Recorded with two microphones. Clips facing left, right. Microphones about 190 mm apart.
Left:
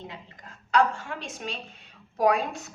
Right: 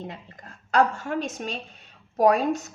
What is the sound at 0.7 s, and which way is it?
A woman's voice, 45° right (ahead or behind).